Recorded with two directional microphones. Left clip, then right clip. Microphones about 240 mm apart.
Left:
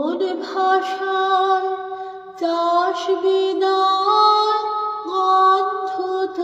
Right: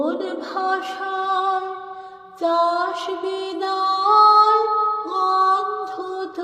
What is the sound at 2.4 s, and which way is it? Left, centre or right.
Mantra, right.